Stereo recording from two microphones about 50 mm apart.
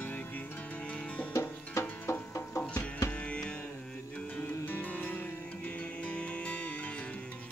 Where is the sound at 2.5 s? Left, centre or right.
Left.